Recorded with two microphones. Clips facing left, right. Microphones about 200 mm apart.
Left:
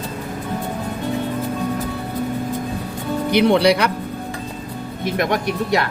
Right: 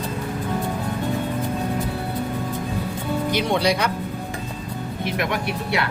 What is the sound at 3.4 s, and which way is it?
Speech, 65° left (ahead or behind).